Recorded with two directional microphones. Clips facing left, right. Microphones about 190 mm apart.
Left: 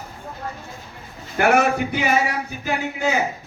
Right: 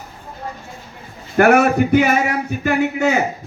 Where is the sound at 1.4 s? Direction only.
50° right (ahead or behind).